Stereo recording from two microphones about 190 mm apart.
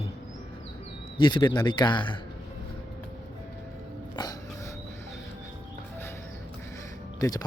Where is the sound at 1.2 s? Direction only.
25° left (ahead or behind).